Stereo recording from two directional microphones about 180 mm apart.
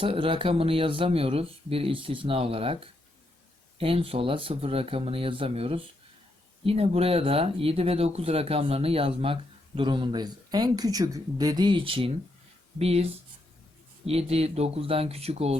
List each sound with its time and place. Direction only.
0.0 s speech: 30° right (ahead or behind)
14.1 s speech: 35° right (ahead or behind)